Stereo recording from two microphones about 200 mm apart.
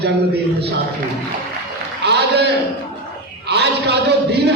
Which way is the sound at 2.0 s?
55° right (ahead or behind).